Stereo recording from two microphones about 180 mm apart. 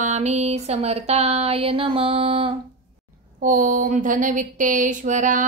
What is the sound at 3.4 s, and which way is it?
Speech, 45° right (ahead or behind).